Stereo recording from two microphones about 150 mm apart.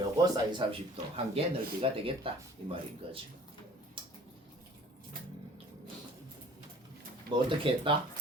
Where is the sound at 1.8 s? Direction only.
40° right (ahead or behind).